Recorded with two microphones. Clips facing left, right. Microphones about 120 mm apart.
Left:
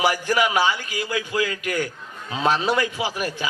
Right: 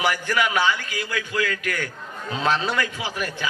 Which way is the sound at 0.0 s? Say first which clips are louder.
Left 2 dB; 25° left (ahead or behind).